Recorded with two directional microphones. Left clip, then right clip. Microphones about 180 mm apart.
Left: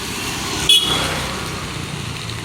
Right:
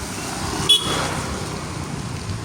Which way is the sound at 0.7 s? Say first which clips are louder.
Left 3 dB; 10° right (ahead or behind).